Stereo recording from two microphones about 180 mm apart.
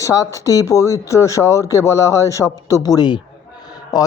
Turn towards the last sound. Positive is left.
turn(degrees=20)  # may be behind; listen again after turning